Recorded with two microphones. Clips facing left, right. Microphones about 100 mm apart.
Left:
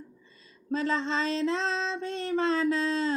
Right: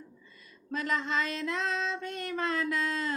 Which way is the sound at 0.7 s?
30° left (ahead or behind).